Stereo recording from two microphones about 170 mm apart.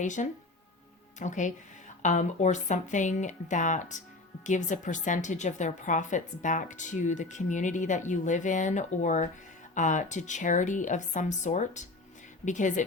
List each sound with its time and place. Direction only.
0.0 s a woman's voice: 45° left (ahead or behind)